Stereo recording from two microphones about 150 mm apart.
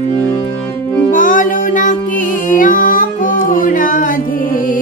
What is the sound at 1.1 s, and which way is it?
Music, 60° left (ahead or behind).